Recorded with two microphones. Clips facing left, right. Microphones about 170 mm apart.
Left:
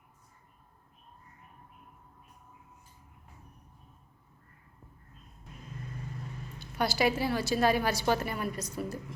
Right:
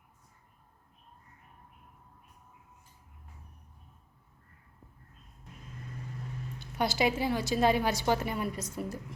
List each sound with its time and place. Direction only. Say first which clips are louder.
6.6 s a woman's voice: even; 20° right (ahead or behind)